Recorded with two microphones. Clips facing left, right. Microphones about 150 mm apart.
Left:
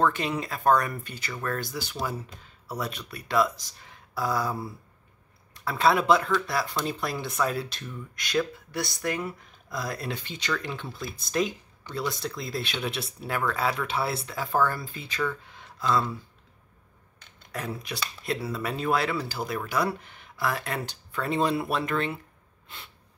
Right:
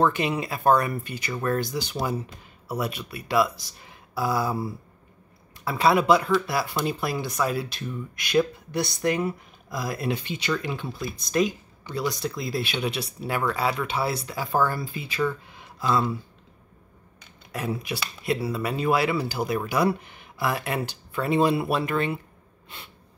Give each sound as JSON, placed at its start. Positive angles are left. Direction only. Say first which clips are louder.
{"t": 0.0, "sound": "speech", "louder": "right 3 dB", "side_deg": -10}
{"t": 8.7, "sound": "speech", "louder": "right 5 dB", "side_deg": -20}
{"t": 9.7, "sound": "speech", "louder": "right 4 dB", "side_deg": -10}
{"t": 17.5, "sound": "speech", "louder": "right 4 dB", "side_deg": -10}